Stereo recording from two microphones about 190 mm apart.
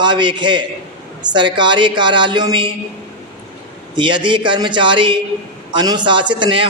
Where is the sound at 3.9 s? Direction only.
25° right (ahead or behind).